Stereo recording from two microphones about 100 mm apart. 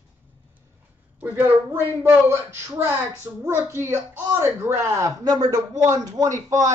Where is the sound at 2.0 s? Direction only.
25° right (ahead or behind).